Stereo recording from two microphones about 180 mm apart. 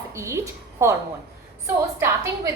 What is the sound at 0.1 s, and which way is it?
A woman's voice, 15° right (ahead or behind).